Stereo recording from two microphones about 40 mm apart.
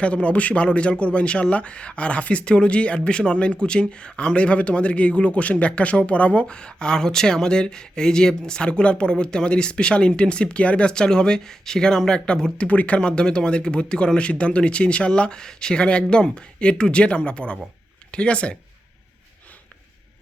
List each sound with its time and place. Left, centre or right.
0.0 s speech: left
12.5 s speech: left
13.0 s speech: left
15.4 s speech: centre